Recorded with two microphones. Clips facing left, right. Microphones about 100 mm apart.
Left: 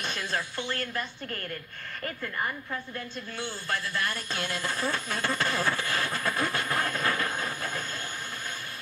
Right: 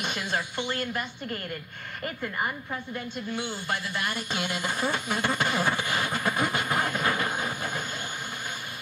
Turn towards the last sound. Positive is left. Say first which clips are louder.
# right 2 dB
turn(degrees=-15)  # may be behind; listen again after turning